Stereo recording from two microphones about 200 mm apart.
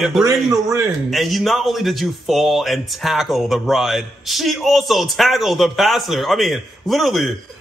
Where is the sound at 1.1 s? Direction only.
Centre (ahead or behind).